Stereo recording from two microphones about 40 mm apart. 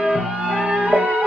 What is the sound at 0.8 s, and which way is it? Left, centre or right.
Music, right.